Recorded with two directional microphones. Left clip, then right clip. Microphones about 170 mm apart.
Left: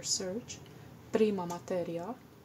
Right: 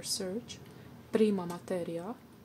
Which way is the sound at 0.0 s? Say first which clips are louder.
Left 1 dB; 10° right (ahead or behind).